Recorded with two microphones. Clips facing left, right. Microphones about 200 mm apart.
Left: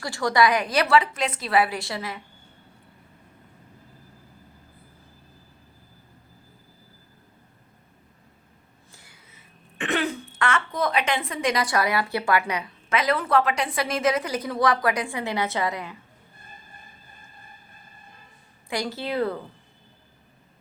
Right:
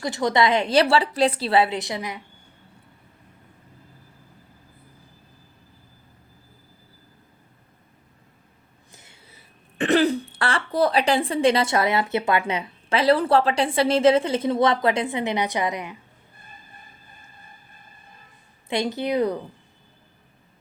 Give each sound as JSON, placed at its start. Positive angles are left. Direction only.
{"t": 0.0, "sound": "a woman's voice", "side_deg": -20}
{"t": 8.9, "sound": "a sound", "side_deg": -20}
{"t": 9.3, "sound": "speech", "side_deg": -35}
{"t": 18.7, "sound": "a woman's voice", "side_deg": -20}